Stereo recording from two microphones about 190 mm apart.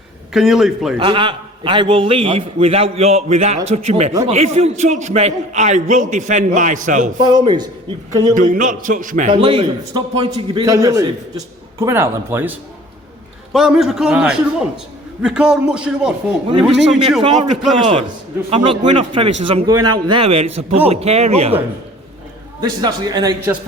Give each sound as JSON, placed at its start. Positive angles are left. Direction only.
{"t": 0.3, "sound": "a man's voice", "side_deg": 0}
{"t": 0.9, "sound": "a man's voice", "side_deg": -25}
{"t": 7.2, "sound": "a man's voice", "side_deg": -25}
{"t": 8.4, "sound": "a man's voice", "side_deg": -45}
{"t": 9.3, "sound": "a man's voice", "side_deg": -30}
{"t": 17.2, "sound": "a man's voice", "side_deg": -25}
{"t": 19.6, "sound": "a man's voice", "side_deg": -20}
{"t": 22.6, "sound": "a man's voice", "side_deg": -20}